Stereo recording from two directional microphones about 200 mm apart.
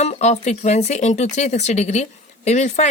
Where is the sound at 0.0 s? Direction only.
35° left (ahead or behind).